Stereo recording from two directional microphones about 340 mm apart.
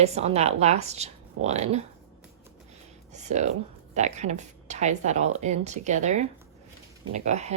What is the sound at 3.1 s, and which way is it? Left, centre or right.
Speech, centre.